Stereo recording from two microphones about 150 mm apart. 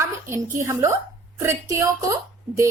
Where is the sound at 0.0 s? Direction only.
20° right (ahead or behind).